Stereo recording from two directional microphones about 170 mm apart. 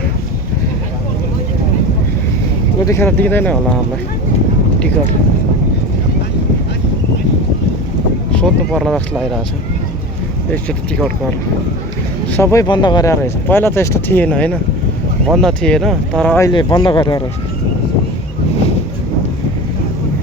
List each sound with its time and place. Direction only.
2.8 s speech: 15° left (ahead or behind)
8.3 s speech: 5° left (ahead or behind)
10.5 s speech: 5° left (ahead or behind)
12.6 s speech: 25° left (ahead or behind); by 16.4 s 5° left (ahead or behind)
16.4 s speech: 25° left (ahead or behind)